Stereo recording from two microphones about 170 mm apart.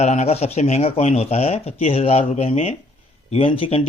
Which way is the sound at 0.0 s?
40° left (ahead or behind).